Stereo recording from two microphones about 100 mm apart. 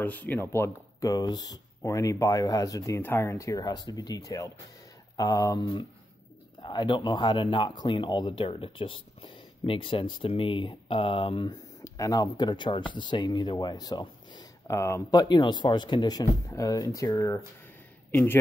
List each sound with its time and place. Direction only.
0.0 s speech: 15° left (ahead or behind)
1.1 s speech: 40° left (ahead or behind)
3.0 s speech: 25° left (ahead or behind)
6.6 s speech: 45° left (ahead or behind)
11.8 s speech: 35° left (ahead or behind)
14.7 s speech: 25° left (ahead or behind)
15.0 s speech: 45° left (ahead or behind)
18.1 s a man's voice: 20° left (ahead or behind)